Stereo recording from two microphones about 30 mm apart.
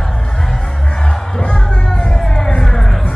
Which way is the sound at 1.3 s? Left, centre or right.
Left.